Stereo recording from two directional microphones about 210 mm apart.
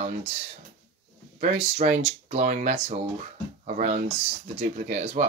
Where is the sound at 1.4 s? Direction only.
30° right (ahead or behind).